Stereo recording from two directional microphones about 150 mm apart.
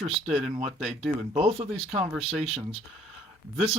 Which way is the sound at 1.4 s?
40° right (ahead or behind).